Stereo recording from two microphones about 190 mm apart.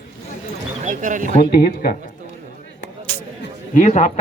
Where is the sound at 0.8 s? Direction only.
40° right (ahead or behind).